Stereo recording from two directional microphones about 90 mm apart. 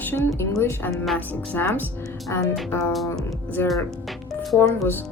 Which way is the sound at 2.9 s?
Centre (ahead or behind).